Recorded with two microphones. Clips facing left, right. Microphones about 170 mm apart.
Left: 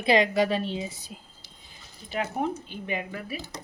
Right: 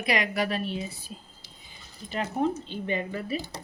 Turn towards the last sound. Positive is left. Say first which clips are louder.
# right 3 dB
turn(degrees=10)  # may be behind; listen again after turning